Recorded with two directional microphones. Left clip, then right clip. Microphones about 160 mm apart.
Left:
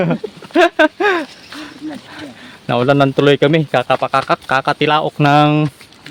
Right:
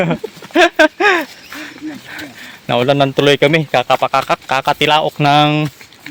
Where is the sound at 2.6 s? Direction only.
20° left (ahead or behind).